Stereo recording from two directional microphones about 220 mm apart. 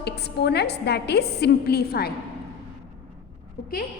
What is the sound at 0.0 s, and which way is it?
A woman's voice, 50° left (ahead or behind).